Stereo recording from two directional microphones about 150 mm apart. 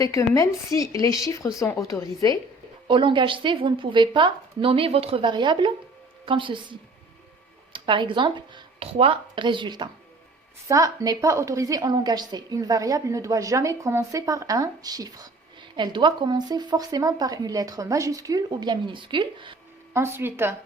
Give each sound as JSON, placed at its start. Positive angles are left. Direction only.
{"t": 0.0, "sound": "speech", "side_deg": 20}
{"t": 2.8, "sound": "a woman's voice", "side_deg": -35}
{"t": 19.9, "sound": "a woman's voice", "side_deg": -15}